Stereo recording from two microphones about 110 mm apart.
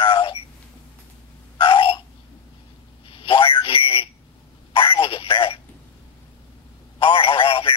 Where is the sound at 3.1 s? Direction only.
55° left (ahead or behind).